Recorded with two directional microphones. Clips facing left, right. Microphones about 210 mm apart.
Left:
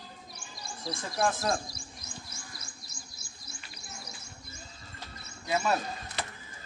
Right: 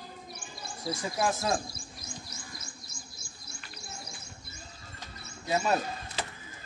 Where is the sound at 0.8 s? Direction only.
Centre (ahead or behind).